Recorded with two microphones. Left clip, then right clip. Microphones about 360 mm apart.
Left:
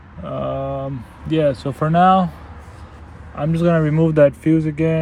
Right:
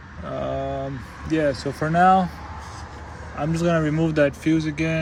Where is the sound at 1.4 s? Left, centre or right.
Left.